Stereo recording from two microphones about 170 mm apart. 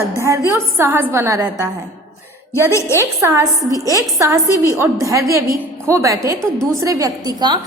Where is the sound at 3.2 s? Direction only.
15° right (ahead or behind).